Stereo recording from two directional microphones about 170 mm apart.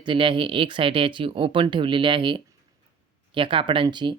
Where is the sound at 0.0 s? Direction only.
30° right (ahead or behind).